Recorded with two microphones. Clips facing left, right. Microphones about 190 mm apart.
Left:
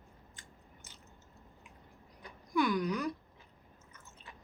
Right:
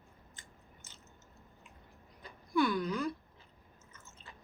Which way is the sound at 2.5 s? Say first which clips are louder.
Even; 15° left (ahead or behind).